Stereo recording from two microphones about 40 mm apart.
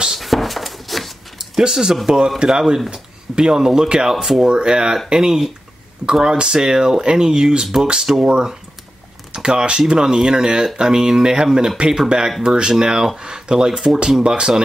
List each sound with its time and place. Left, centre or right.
0.1 s a sound: centre
1.6 s speech: centre
4.5 s speech: right